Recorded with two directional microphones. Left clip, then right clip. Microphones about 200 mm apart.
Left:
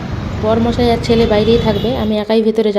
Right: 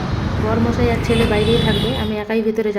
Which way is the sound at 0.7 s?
20° left (ahead or behind).